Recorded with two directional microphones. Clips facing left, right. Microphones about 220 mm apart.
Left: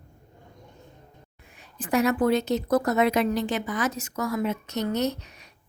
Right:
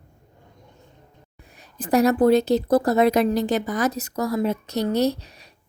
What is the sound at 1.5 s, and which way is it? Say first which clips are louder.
A woman's voice: right 5 dB; 40° right (ahead or behind).